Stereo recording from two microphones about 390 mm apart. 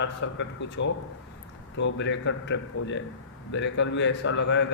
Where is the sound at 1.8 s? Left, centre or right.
Left.